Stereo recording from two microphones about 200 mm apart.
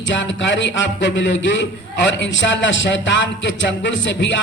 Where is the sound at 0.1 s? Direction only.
65° left (ahead or behind).